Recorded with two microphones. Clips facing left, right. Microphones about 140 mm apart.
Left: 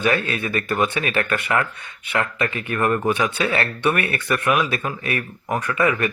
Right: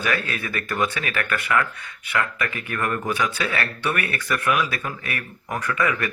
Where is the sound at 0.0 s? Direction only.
25° left (ahead or behind).